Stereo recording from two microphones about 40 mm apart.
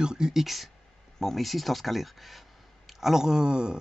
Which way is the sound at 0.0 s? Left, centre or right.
Centre.